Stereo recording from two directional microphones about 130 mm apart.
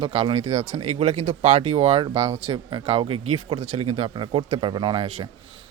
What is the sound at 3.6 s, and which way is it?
Speech, 55° right (ahead or behind).